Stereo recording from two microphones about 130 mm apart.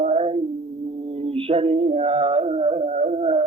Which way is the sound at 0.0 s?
55° right (ahead or behind).